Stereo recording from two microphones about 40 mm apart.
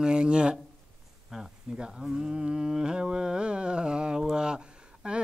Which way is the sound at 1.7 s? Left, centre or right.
Right.